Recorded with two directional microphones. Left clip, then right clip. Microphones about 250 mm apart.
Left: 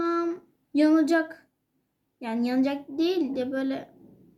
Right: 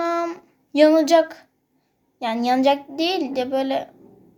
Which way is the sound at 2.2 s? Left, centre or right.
Right.